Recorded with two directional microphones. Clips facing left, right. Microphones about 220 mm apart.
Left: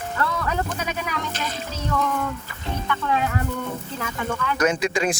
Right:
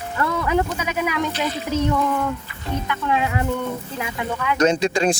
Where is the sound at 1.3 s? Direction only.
45° left (ahead or behind).